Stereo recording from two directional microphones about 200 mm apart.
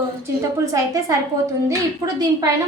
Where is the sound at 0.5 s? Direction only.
15° right (ahead or behind).